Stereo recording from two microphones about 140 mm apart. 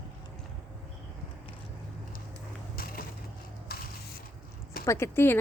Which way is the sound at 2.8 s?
90° left.